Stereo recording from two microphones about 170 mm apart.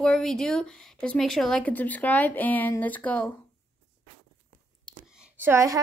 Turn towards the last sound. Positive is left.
turn(degrees=-15)  # may be behind; listen again after turning